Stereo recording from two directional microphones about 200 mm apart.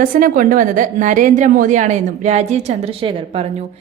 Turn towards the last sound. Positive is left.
turn(degrees=-30)  # may be behind; listen again after turning